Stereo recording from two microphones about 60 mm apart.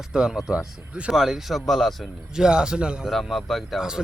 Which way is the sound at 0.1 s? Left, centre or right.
Centre.